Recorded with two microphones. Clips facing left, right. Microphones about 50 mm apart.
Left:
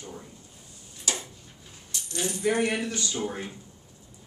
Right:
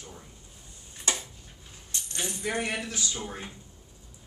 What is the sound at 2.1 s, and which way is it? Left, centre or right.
Speech, centre.